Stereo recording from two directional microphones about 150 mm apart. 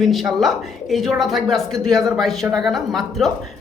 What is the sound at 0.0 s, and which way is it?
A woman's voice, centre (ahead or behind).